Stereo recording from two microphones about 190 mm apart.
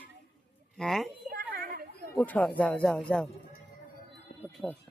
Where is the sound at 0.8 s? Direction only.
Centre (ahead or behind).